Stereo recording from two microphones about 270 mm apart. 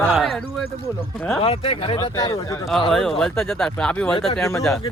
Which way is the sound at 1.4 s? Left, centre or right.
Left.